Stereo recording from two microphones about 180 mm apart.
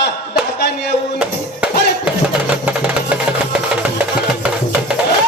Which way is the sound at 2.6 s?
5° right (ahead or behind).